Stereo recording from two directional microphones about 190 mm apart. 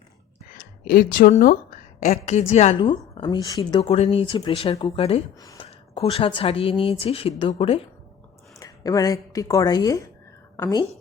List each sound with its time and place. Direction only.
0.5 s speech: 50° left (ahead or behind)
2.0 s a woman's voice: 40° left (ahead or behind)
5.4 s a woman's voice: 20° left (ahead or behind)
8.5 s a woman's voice: 15° left (ahead or behind)